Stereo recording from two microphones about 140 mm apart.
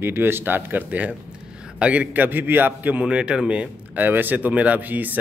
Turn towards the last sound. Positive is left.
turn(degrees=-10)  # may be behind; listen again after turning